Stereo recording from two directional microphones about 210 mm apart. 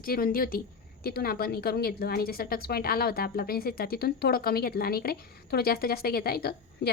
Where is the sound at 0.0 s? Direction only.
45° left (ahead or behind).